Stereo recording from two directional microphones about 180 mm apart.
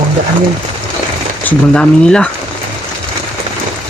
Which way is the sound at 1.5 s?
5° left (ahead or behind).